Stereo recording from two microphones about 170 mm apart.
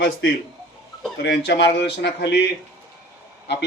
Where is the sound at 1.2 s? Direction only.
85° left.